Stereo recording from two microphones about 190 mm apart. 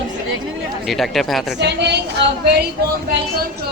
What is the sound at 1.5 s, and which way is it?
Speech, 65° right (ahead or behind).